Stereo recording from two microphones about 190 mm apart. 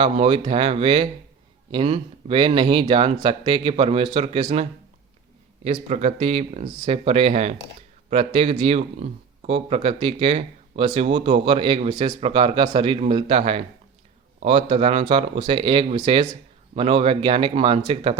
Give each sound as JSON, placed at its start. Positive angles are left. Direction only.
{"t": 0.0, "sound": "speech", "side_deg": -30}
{"t": 5.6, "sound": "speech", "side_deg": -35}